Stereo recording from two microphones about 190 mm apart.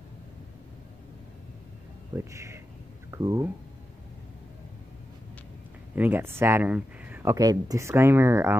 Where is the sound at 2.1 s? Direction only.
15° right (ahead or behind).